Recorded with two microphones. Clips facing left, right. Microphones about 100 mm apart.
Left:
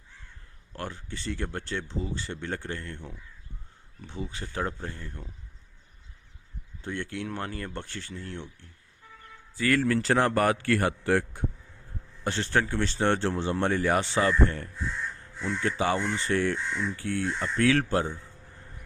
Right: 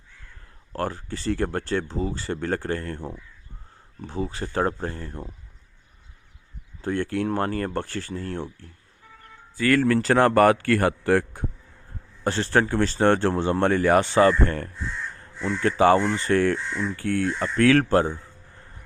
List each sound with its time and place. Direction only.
0.7 s speech: 45° right (ahead or behind)
4.4 s speech: 50° right (ahead or behind)
6.8 s speech: 45° right (ahead or behind)
9.6 s speech: 60° right (ahead or behind)
12.2 s speech: 40° right (ahead or behind)